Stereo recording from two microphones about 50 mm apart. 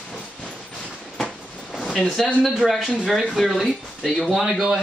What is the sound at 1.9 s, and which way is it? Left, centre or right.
Speech, centre.